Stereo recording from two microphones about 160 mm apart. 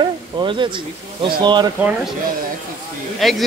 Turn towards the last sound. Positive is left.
turn(degrees=0)  # may be behind; listen again after turning